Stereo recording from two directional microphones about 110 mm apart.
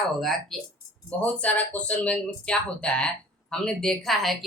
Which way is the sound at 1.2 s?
15° left (ahead or behind).